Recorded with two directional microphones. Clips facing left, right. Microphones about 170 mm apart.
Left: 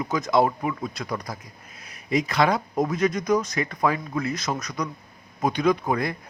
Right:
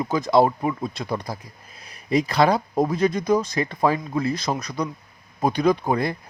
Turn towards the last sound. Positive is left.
turn(degrees=-30)  # may be behind; listen again after turning